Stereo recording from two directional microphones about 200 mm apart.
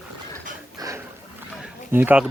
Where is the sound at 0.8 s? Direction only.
20° right (ahead or behind).